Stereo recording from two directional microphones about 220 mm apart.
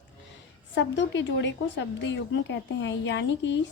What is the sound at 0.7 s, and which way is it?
Speech, 55° left (ahead or behind).